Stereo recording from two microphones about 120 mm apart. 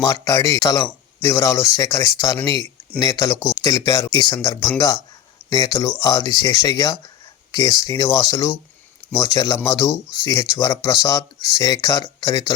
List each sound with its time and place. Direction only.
0.0 s speech: 30° left (ahead or behind)